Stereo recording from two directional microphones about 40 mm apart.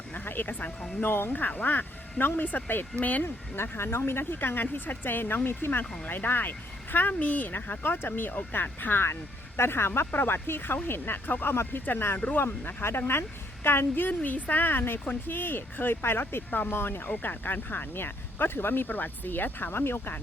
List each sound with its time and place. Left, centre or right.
0.3 s speech: left
1.3 s speech: left
2.9 s speech: left
3.2 s speech: left
6.1 s speech: left
9.6 s speech: left
10.1 s speech: left
12.4 s speech: left
13.7 s speech: left
14.2 s speech: left
14.6 s speech: left
17.2 s speech: left